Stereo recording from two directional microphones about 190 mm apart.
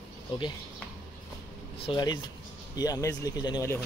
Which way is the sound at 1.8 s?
25° left (ahead or behind).